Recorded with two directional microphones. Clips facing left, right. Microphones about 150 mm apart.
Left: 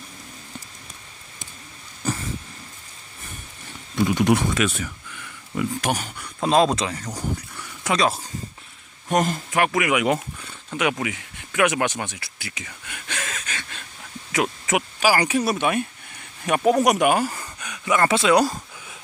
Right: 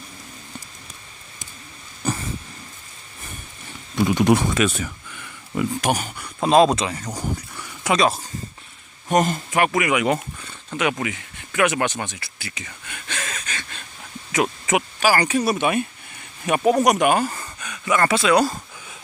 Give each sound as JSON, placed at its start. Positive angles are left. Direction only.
{"t": 4.2, "sound": "speech", "side_deg": -30}
{"t": 5.5, "sound": "speech", "side_deg": -15}
{"t": 14.3, "sound": "a sound", "side_deg": 0}
{"t": 15.1, "sound": "speech", "side_deg": 10}
{"t": 15.4, "sound": "speech", "side_deg": 0}